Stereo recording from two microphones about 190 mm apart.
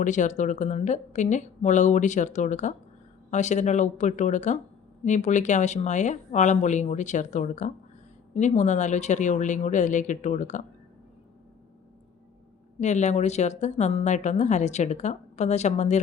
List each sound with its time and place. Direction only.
0.0 s speech: 40° left (ahead or behind)
12.8 s speech: 40° left (ahead or behind)